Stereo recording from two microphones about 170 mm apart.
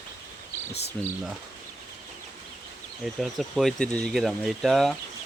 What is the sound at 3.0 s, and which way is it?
Speech, centre (ahead or behind).